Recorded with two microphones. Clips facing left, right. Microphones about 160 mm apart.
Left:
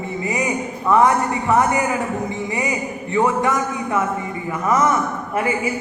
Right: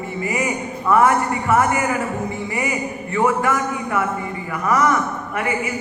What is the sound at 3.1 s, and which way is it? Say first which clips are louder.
A man's voice: left 1 dB; 20° left (ahead or behind).